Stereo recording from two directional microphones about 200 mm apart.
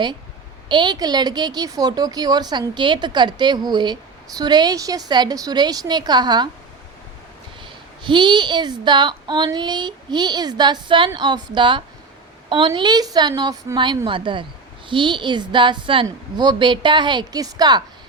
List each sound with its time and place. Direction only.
0.7 s speech: 20° right (ahead or behind)
7.6 s speech: 25° right (ahead or behind)